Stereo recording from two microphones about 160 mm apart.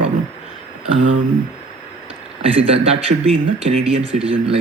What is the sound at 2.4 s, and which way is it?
A man's voice, 35° right (ahead or behind).